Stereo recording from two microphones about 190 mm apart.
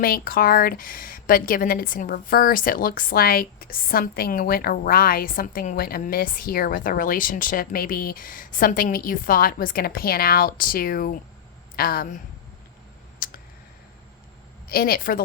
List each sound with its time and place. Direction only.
0.0 s a woman's voice: 50° left (ahead or behind)
13.1 s clicking: 50° left (ahead or behind)
14.7 s a woman's voice: 50° left (ahead or behind)